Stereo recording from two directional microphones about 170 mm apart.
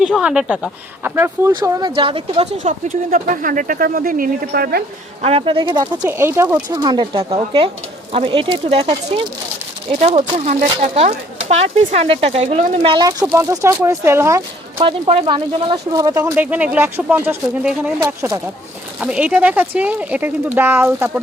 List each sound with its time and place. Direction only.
0.0 s speech: 5° right (ahead or behind)
1.5 s speech: 25° right (ahead or behind); by 4.8 s 60° right (ahead or behind)
5.2 s speech: 35° right (ahead or behind)
6.1 s speech: 15° right (ahead or behind)
6.8 s speech: 30° right (ahead or behind)
14.8 s speech: 30° right (ahead or behind); by 21.1 s 15° right (ahead or behind)